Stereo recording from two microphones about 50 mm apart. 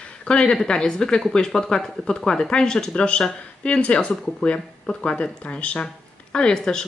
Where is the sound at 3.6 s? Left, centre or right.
Left.